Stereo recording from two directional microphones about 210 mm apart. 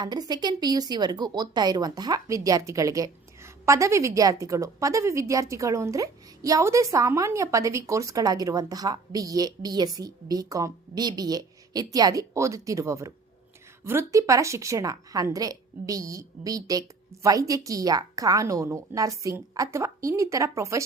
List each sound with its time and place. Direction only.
0.0 s a woman's voice: 20° right (ahead or behind)